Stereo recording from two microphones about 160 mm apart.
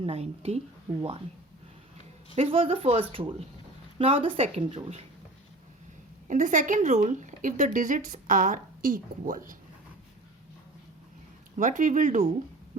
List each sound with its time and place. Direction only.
0.0 s speech: 40° right (ahead or behind)
2.3 s speech: 35° right (ahead or behind)
6.2 s speech: 55° right (ahead or behind)
11.5 s speech: 50° right (ahead or behind)